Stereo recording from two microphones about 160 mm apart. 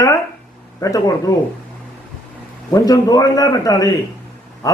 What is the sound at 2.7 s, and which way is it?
A man's voice, 20° left (ahead or behind).